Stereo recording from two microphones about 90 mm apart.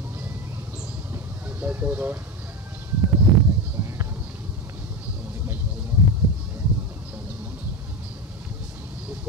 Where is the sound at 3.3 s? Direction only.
Centre (ahead or behind).